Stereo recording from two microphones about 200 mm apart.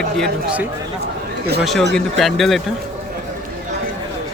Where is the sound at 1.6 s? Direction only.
Centre (ahead or behind).